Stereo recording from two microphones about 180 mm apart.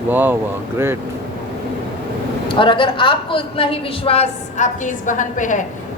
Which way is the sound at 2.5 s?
30° left (ahead or behind).